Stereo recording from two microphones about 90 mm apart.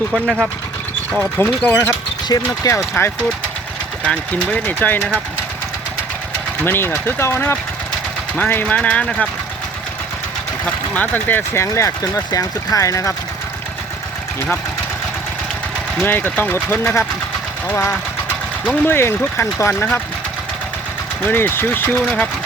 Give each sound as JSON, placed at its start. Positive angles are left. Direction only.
{"t": 0.1, "sound": "speech", "side_deg": 0}
{"t": 1.2, "sound": "speech", "side_deg": 20}
{"t": 2.3, "sound": "speech", "side_deg": 35}
{"t": 4.0, "sound": "speech", "side_deg": 15}
{"t": 6.6, "sound": "speech", "side_deg": 25}
{"t": 10.7, "sound": "speech", "side_deg": 20}
{"t": 16.0, "sound": "speech", "side_deg": 25}
{"t": 18.8, "sound": "speech", "side_deg": 25}
{"t": 21.2, "sound": "speech", "side_deg": 25}